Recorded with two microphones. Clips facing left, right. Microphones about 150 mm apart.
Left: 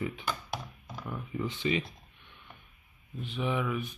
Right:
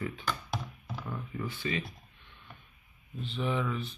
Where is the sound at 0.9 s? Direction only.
5° left (ahead or behind).